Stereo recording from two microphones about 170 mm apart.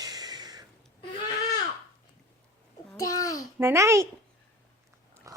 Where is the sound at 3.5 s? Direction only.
15° right (ahead or behind).